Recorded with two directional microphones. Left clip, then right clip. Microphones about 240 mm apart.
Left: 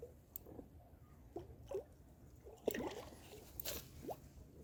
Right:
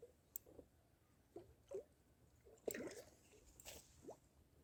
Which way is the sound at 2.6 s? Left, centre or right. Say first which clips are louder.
Left 7 dB; centre.